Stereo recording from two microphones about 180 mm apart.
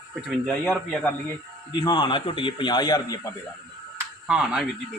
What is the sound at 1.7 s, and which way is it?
A man's voice, 25° left (ahead or behind).